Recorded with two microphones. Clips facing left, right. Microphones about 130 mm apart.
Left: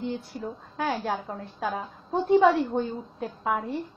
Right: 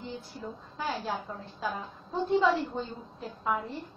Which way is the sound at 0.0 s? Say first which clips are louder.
Left 7 dB; 65° left (ahead or behind).